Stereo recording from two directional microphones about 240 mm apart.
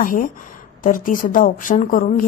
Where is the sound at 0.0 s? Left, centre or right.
Left.